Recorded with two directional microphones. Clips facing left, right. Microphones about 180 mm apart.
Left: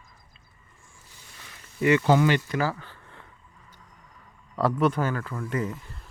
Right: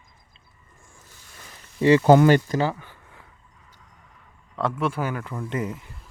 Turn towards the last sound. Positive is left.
turn(degrees=-20)  # may be behind; listen again after turning